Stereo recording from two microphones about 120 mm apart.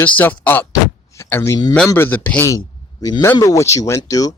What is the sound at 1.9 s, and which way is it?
Speech, 20° left (ahead or behind).